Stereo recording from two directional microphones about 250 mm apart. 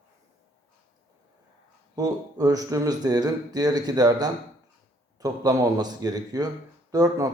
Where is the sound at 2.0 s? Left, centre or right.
Centre.